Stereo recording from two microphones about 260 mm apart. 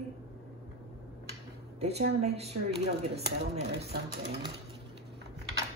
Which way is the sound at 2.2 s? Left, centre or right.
Right.